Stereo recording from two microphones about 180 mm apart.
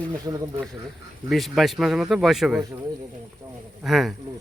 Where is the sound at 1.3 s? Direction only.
Centre (ahead or behind).